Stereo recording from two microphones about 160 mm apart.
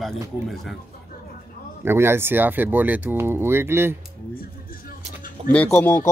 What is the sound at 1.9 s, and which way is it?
Speech, 15° right (ahead or behind).